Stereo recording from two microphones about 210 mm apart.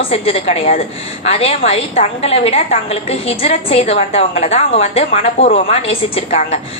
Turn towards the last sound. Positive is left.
turn(degrees=30)  # may be behind; listen again after turning